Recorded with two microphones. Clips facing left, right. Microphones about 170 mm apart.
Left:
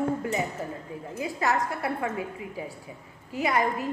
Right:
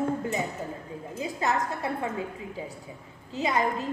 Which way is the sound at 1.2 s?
20° right (ahead or behind).